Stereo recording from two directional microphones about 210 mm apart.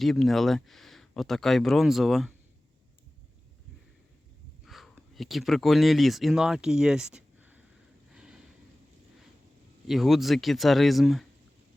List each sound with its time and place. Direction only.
0.0 s speech: centre (ahead or behind)
4.6 s speech: centre (ahead or behind)
8.1 s snort: 5° right (ahead or behind)
9.8 s speech: centre (ahead or behind)